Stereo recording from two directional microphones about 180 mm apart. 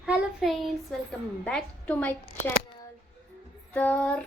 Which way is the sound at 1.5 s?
5° left (ahead or behind).